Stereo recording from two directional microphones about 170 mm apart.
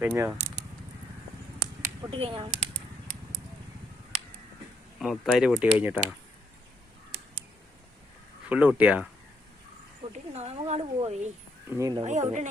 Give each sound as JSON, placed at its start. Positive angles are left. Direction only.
{"t": 0.0, "sound": "speech", "side_deg": -10}
{"t": 2.0, "sound": "a woman's voice", "side_deg": -30}
{"t": 4.9, "sound": "speech", "side_deg": 0}
{"t": 8.4, "sound": "speech", "side_deg": -10}
{"t": 10.3, "sound": "a woman's voice", "side_deg": -40}
{"t": 11.7, "sound": "speech", "side_deg": -20}
{"t": 12.0, "sound": "speech", "side_deg": -45}